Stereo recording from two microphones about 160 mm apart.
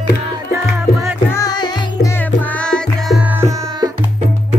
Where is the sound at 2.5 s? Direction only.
5° left (ahead or behind).